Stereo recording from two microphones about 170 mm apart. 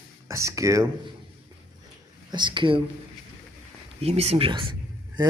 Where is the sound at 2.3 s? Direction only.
25° right (ahead or behind).